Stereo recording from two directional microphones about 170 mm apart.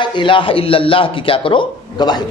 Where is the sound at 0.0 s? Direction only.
30° left (ahead or behind).